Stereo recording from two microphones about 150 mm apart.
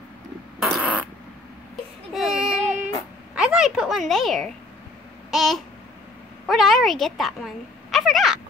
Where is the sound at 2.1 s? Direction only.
5° right (ahead or behind).